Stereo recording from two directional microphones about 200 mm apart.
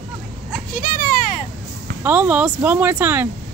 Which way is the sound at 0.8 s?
45° left (ahead or behind).